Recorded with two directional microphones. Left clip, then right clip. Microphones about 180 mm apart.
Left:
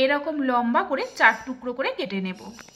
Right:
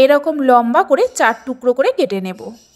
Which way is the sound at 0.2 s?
35° right (ahead or behind).